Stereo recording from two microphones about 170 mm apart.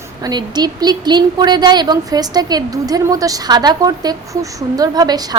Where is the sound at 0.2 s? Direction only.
25° right (ahead or behind).